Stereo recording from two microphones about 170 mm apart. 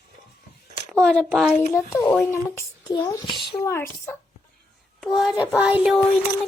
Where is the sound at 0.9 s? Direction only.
5° left (ahead or behind).